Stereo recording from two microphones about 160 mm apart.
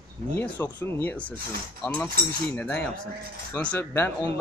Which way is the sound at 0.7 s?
15° left (ahead or behind).